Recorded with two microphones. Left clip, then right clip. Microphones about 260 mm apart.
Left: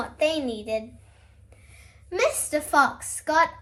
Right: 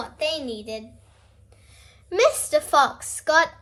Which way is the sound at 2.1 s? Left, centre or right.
Right.